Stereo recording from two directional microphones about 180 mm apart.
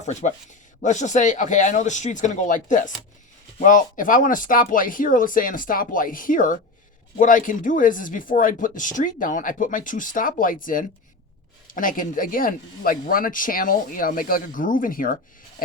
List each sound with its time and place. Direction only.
0.0 s speech: 40° left (ahead or behind)